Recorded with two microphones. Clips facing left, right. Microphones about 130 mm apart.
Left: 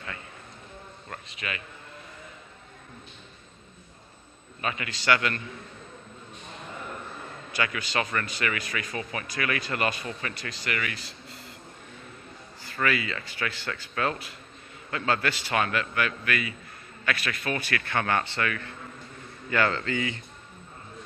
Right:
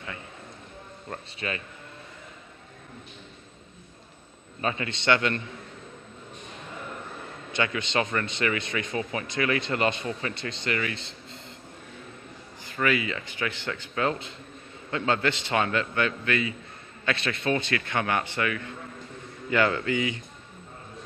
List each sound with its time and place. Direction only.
1.1 s speech: 30° right (ahead or behind)
4.6 s speech: 30° right (ahead or behind)
7.5 s speech: 25° right (ahead or behind)
12.6 s a man's voice: 20° right (ahead or behind)